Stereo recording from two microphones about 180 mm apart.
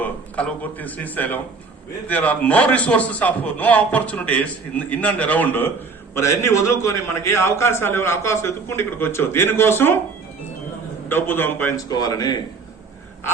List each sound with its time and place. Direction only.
0.0 s a man's voice: 10° left (ahead or behind)
11.1 s a man's voice: 10° left (ahead or behind)